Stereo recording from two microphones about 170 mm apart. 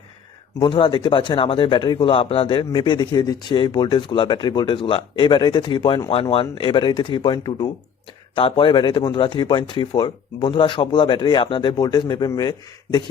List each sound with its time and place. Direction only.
0.6 s speech: 25° left (ahead or behind)